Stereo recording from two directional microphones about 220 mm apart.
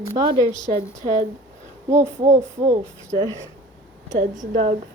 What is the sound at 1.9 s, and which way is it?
Speech, 30° right (ahead or behind).